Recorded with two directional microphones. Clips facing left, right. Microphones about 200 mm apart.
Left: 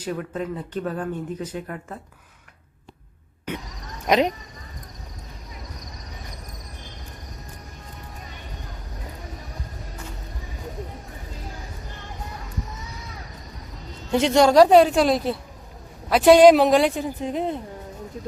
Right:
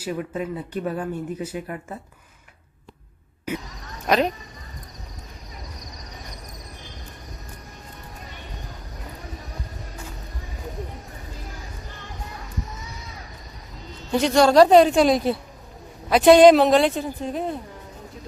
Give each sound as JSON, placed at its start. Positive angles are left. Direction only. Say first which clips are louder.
{"t": 0.0, "sound": "speech", "louder": "even", "side_deg": -10}
{"t": 4.0, "sound": "speech", "louder": "left 1 dB", "side_deg": 20}
{"t": 14.1, "sound": "speech", "louder": "even", "side_deg": 20}